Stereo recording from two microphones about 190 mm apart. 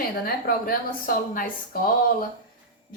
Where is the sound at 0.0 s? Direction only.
50° left (ahead or behind).